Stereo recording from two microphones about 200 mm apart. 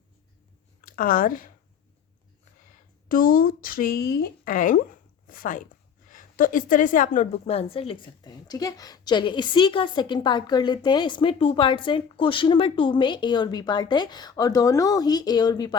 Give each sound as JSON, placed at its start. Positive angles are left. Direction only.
{"t": 0.9, "sound": "speech", "side_deg": 45}
{"t": 2.6, "sound": "a woman's voice", "side_deg": 45}